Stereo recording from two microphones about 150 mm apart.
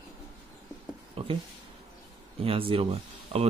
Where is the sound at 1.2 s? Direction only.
40° right (ahead or behind).